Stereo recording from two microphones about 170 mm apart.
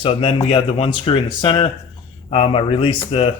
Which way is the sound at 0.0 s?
30° left (ahead or behind).